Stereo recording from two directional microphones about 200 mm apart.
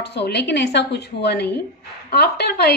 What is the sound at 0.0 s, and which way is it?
A woman's voice, 55° left (ahead or behind).